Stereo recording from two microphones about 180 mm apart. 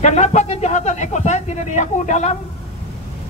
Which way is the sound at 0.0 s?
40° left (ahead or behind).